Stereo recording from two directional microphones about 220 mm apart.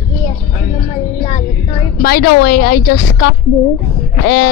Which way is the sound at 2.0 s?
45° left (ahead or behind).